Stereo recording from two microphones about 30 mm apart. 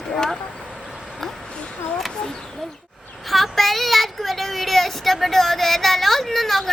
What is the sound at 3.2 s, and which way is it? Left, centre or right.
A woman's voice, centre.